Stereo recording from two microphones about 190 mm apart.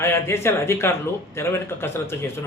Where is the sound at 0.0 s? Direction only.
15° left (ahead or behind).